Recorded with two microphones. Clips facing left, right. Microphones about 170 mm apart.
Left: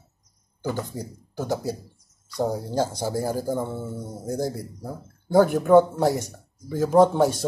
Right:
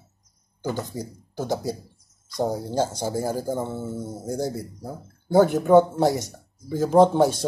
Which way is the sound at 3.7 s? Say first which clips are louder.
Right 2 dB; 5° right (ahead or behind).